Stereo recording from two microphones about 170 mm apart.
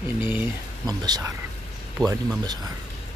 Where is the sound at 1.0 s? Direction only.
25° right (ahead or behind).